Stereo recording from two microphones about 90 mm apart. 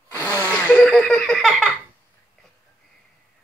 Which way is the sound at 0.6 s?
10° left (ahead or behind).